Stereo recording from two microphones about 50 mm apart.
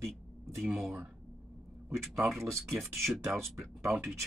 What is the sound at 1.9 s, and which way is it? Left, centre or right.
Speech, right.